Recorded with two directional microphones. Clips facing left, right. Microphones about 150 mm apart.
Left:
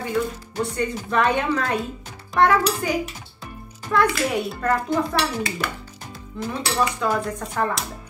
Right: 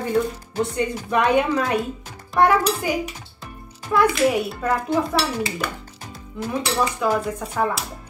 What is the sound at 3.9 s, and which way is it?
Speech, 10° right (ahead or behind).